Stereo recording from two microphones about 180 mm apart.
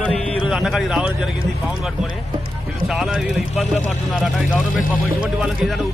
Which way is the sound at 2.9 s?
Centre (ahead or behind).